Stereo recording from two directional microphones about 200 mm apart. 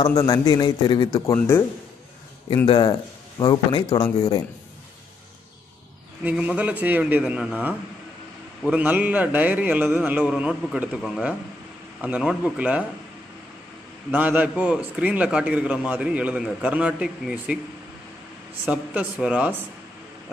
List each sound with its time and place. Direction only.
0.0 s speech: 15° left (ahead or behind)
2.6 s speech: 25° left (ahead or behind)
6.2 s a man's voice: 5° right (ahead or behind)
14.1 s a man's voice: 10° right (ahead or behind)
18.7 s a man's voice: 5° right (ahead or behind)